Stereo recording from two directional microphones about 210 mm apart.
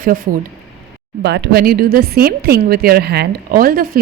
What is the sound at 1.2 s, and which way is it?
Speech, 55° right (ahead or behind).